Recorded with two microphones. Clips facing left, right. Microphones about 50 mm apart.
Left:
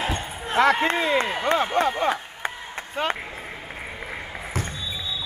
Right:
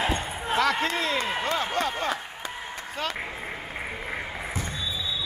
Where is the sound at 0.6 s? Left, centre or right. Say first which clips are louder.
Left 6 dB; left.